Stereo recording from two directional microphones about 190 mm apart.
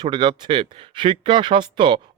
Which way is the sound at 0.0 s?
25° right (ahead or behind).